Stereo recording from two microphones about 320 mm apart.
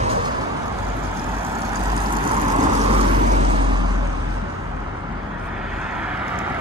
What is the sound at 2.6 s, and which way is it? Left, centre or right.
Vehicle, centre.